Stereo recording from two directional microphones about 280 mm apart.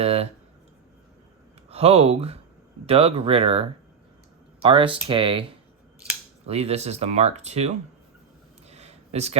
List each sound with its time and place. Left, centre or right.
0.0 s speech: right
1.7 s speech: right
8.6 s a sound: right